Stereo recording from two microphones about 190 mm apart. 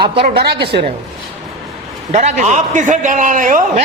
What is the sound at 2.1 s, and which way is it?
Speech, 40° right (ahead or behind).